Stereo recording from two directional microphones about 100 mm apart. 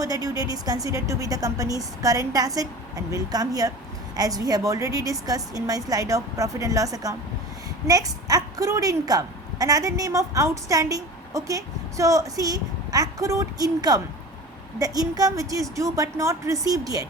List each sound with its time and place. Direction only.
0.0 s a woman's voice: 35° right (ahead or behind)